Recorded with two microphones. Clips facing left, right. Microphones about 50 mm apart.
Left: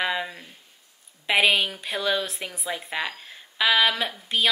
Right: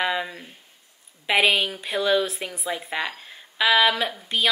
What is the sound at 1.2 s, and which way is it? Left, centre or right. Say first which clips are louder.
A woman's voice: right 1 dB; centre.